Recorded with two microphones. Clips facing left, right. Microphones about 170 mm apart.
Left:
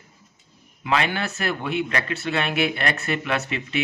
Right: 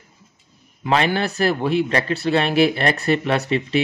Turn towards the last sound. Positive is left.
turn(degrees=-35)  # may be behind; listen again after turning